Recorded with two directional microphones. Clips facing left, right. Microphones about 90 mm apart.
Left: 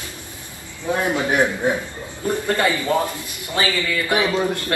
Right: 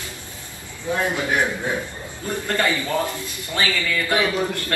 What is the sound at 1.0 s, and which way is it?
Speech, 20° left (ahead or behind).